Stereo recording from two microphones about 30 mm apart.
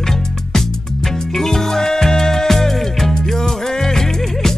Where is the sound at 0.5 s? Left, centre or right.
Centre.